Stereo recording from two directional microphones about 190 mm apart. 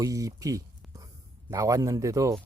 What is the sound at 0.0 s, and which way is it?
Speech, 20° right (ahead or behind).